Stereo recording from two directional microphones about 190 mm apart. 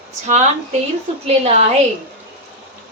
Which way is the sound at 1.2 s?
35° right (ahead or behind).